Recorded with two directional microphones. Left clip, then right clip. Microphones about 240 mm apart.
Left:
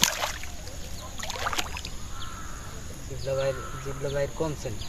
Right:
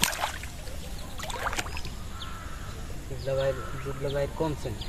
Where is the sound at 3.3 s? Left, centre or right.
Centre.